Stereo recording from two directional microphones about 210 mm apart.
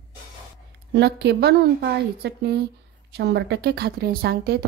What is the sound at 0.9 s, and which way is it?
Speech, 55° right (ahead or behind).